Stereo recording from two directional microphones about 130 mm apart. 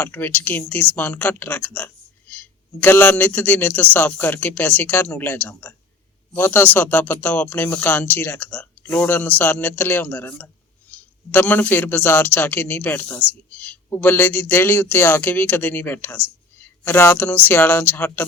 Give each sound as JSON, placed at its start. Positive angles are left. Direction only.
{"t": 0.0, "sound": "a man's voice", "side_deg": 15}